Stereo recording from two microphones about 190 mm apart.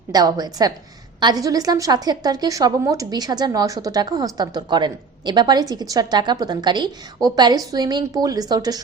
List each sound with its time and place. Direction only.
0.1 s a woman's voice: 20° right (ahead or behind)